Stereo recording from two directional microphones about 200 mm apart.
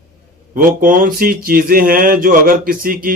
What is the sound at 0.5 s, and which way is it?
Speech, 45° right (ahead or behind).